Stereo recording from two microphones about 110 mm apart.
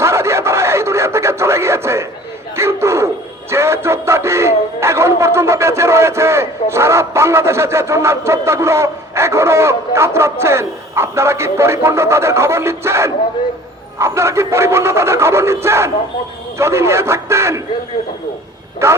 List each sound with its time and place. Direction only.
0.0 s radio: 25° right (ahead or behind)
2.6 s dog: 25° right (ahead or behind)
3.5 s music: 25° right (ahead or behind)
14.0 s speech: 25° right (ahead or behind)
16.6 s radio: 25° right (ahead or behind)